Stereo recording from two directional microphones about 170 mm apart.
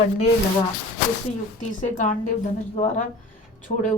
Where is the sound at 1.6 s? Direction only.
50° left (ahead or behind).